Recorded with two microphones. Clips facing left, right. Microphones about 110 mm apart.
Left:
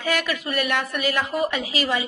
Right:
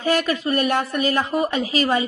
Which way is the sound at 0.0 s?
40° right (ahead or behind).